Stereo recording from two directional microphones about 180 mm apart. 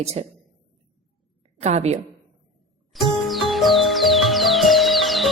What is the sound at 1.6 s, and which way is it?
Speech, 35° right (ahead or behind).